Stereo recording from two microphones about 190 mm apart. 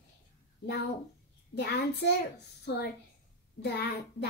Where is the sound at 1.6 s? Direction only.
60° left (ahead or behind).